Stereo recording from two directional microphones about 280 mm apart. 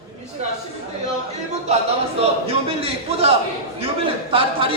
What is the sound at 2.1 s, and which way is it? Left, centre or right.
A man's voice, right.